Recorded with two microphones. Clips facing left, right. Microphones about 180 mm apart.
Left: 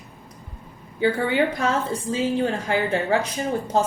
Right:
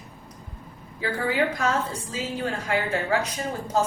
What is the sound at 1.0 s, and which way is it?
A woman's voice, 25° left (ahead or behind).